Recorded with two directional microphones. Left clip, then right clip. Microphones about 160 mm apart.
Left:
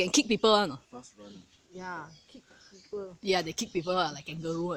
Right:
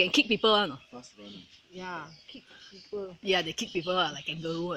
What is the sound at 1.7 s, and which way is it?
Speech, 45° right (ahead or behind).